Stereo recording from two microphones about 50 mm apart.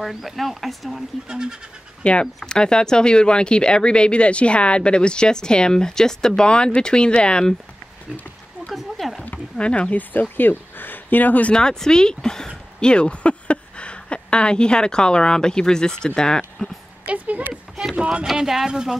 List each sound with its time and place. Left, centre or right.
0.0 s speech: centre
1.3 s speech: centre
2.0 s speech: centre
8.6 s a sound: centre
9.6 s speech: left
11.5 s speech: centre
17.0 s speech: right
18.2 s speech: centre